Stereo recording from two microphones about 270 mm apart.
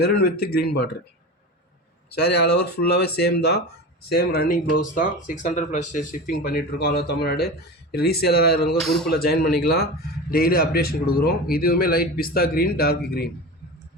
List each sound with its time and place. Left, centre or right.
0.0 s speech: left
2.0 s speech: left